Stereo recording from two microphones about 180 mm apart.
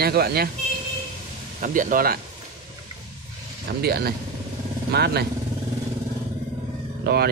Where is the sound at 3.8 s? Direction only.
60° right (ahead or behind).